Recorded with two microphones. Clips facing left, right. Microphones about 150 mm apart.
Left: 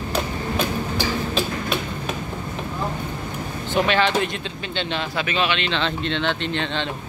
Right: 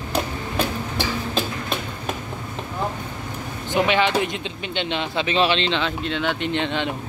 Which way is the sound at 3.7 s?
15° right (ahead or behind).